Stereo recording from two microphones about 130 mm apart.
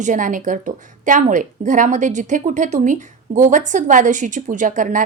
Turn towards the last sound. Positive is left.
turn(degrees=-80)